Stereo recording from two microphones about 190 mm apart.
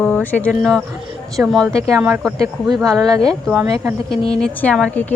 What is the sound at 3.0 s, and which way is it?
Speech, 20° right (ahead or behind).